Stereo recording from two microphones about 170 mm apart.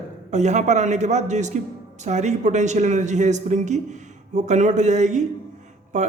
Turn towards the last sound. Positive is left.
turn(degrees=-45)  # may be behind; listen again after turning